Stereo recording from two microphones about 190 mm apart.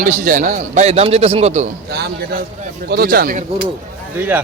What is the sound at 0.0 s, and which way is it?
A man's voice, 40° right (ahead or behind).